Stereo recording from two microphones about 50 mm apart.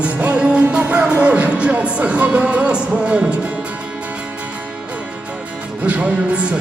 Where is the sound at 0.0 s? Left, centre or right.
Right.